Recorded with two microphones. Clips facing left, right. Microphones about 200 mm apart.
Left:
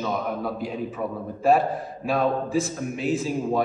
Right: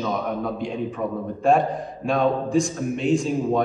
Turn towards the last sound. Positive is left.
turn(degrees=5)  # may be behind; listen again after turning